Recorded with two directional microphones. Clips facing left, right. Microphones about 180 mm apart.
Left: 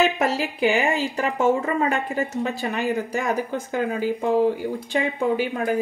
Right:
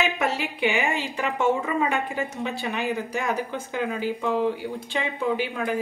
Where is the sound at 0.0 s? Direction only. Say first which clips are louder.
Left 4 dB; 40° left (ahead or behind).